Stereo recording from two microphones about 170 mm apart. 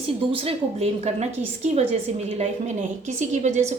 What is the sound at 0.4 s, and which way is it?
A woman's voice, 40° right (ahead or behind).